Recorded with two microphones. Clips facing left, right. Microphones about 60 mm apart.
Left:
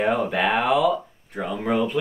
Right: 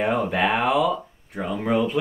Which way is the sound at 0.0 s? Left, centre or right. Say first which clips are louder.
Even; centre.